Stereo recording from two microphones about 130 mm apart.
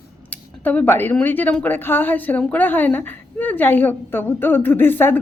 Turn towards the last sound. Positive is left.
turn(degrees=15)  # may be behind; listen again after turning